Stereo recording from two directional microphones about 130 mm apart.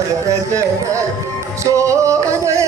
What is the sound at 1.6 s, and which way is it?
Music, 25° right (ahead or behind).